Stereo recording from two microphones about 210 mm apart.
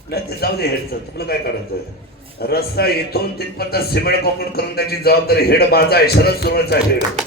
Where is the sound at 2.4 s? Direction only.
50° left (ahead or behind).